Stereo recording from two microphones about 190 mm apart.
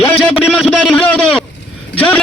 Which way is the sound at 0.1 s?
5° left (ahead or behind).